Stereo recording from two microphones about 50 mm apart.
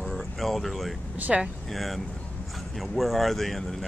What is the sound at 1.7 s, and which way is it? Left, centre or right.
Speech, centre.